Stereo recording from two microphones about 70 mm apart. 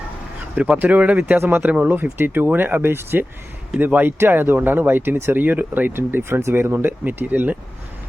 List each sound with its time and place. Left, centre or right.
0.5 s speech: right
2.1 s speech: right